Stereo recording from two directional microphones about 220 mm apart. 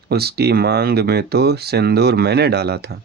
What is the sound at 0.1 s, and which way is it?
Speech, 45° right (ahead or behind).